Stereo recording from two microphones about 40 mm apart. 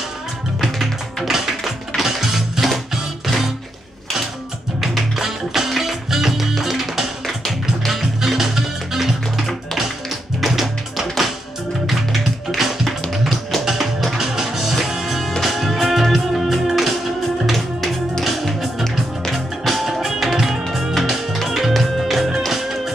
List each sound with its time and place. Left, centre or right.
0.6 s music: centre
4.7 s music: centre
10.4 s tap: centre
11.8 s music: centre
12.5 s tap: centre
13.5 s music: centre
18.2 s music: centre